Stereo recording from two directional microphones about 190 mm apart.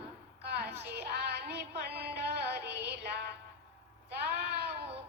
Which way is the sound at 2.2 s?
60° right (ahead or behind).